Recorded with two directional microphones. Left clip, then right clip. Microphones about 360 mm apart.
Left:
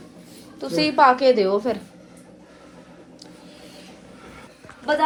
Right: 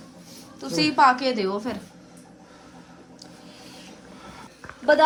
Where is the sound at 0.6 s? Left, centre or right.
Centre.